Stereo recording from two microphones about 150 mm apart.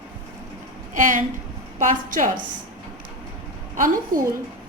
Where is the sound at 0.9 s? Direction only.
60° right (ahead or behind).